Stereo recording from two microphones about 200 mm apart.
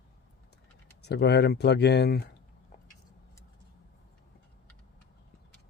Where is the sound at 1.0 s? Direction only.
55° left (ahead or behind).